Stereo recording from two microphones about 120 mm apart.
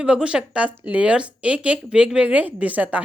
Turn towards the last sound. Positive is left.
turn(degrees=-10)  # may be behind; listen again after turning